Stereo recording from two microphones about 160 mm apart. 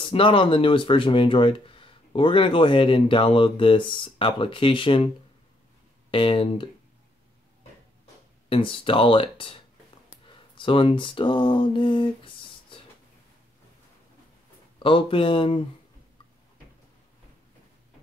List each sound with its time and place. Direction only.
0.0 s speech: 35° left (ahead or behind)
6.1 s speech: 35° left (ahead or behind)
8.5 s speech: 35° left (ahead or behind)
10.2 s a sound: 30° left (ahead or behind)
14.8 s speech: 35° left (ahead or behind)